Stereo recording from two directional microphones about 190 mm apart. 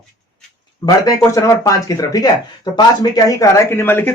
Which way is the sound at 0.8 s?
15° left (ahead or behind).